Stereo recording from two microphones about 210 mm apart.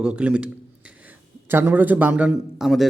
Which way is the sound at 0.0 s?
5° right (ahead or behind).